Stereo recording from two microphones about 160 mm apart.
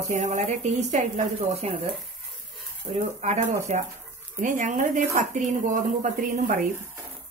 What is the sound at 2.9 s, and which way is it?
Speech, 45° right (ahead or behind).